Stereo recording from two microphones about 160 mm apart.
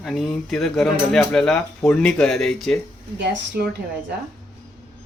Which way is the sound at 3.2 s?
85° right.